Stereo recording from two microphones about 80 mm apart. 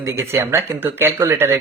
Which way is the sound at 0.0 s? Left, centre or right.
Right.